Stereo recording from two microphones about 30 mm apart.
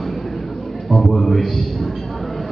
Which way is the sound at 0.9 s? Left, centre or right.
Centre.